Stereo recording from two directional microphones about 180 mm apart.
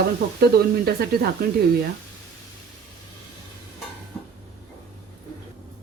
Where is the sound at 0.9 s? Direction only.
60° right (ahead or behind).